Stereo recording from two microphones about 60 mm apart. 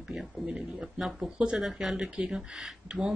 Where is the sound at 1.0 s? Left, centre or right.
Centre.